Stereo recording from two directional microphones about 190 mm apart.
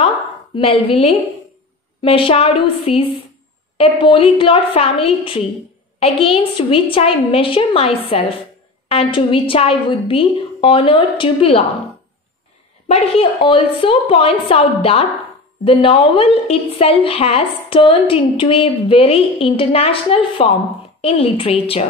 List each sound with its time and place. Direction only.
0.6 s a woman's voice: 30° left (ahead or behind)
12.8 s a woman's voice: 30° left (ahead or behind)